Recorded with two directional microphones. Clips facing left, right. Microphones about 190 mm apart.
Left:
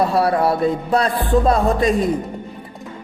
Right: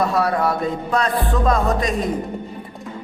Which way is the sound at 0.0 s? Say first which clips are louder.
Left 3 dB; 30° left (ahead or behind).